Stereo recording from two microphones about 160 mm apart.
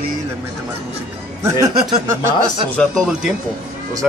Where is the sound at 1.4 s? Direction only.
20° right (ahead or behind).